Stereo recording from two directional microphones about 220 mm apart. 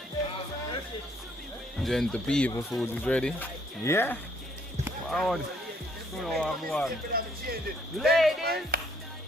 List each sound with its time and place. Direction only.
1.8 s speech: centre (ahead or behind)
7.1 s speech: 45° right (ahead or behind)
7.9 s speech: centre (ahead or behind)
8.7 s speech: 45° right (ahead or behind)